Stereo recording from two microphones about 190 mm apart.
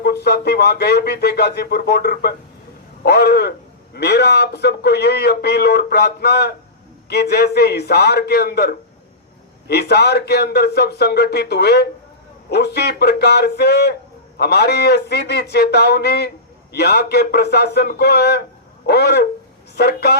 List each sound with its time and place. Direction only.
0.0 s a man's voice: 60° left (ahead or behind)